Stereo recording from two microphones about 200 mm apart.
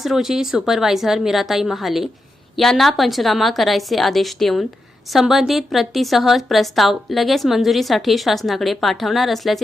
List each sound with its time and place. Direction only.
0.0 s a woman's voice: centre (ahead or behind)